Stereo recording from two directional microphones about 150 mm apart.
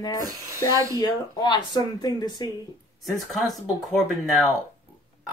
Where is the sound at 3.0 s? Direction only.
Centre (ahead or behind).